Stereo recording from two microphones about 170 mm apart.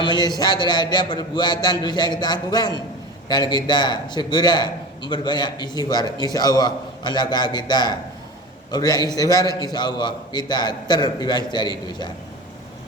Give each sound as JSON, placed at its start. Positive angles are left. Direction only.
{"t": 0.0, "sound": "a man's voice", "side_deg": 25}